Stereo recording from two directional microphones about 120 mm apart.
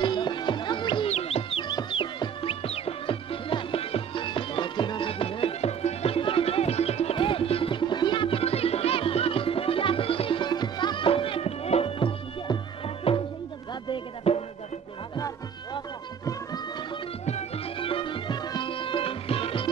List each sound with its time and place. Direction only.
0.0 s music: 40° left (ahead or behind)
1.1 s music: 55° left (ahead or behind)
1.6 s music: 40° left (ahead or behind)
15.1 s music: 30° left (ahead or behind)
17.7 s music: 50° left (ahead or behind)